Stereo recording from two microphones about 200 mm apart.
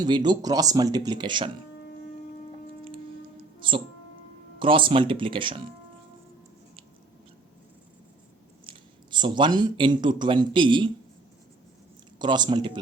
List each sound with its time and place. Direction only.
0.3 s speech: 20° right (ahead or behind)
4.6 s speech: 25° right (ahead or behind)
8.6 s speech: 25° right (ahead or behind)
12.2 s speech: 20° right (ahead or behind)